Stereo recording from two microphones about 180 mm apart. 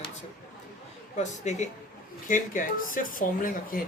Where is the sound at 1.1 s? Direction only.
40° left (ahead or behind).